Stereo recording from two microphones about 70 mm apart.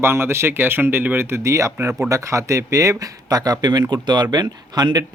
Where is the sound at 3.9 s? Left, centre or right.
Right.